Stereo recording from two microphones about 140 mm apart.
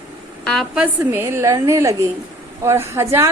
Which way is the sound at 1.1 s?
20° right (ahead or behind).